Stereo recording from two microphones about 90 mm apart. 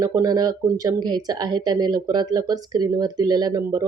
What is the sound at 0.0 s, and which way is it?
Speech, 45° right (ahead or behind).